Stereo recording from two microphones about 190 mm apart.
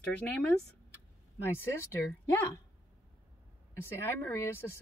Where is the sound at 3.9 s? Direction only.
15° left (ahead or behind).